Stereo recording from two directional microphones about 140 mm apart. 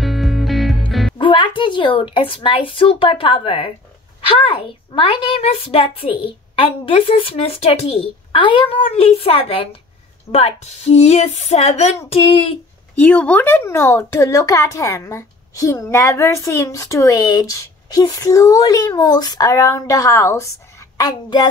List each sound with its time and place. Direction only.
0.0 s music: centre (ahead or behind)
1.1 s a woman's voice: 35° left (ahead or behind)
13.0 s speech: 10° left (ahead or behind); by 21.5 s 30° left (ahead or behind)